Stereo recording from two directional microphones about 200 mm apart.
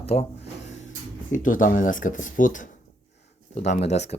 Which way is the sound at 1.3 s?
40° left (ahead or behind).